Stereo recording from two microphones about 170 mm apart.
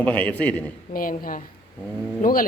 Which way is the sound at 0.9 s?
55° left (ahead or behind).